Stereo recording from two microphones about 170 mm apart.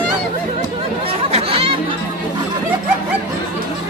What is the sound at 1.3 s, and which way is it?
Chatter, 35° right (ahead or behind).